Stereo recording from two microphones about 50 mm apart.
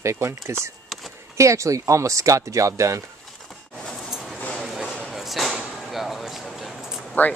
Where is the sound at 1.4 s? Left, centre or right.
Right.